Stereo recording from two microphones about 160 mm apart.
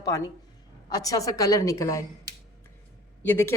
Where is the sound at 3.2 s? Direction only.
15° left (ahead or behind).